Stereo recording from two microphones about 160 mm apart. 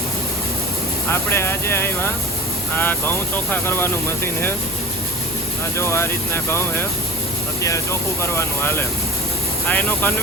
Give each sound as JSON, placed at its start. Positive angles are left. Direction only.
{"t": 1.1, "sound": "speech", "side_deg": 15}
{"t": 5.7, "sound": "speech", "side_deg": 15}